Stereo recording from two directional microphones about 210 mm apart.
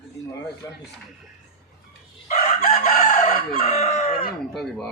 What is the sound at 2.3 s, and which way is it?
Chicken, 35° left (ahead or behind).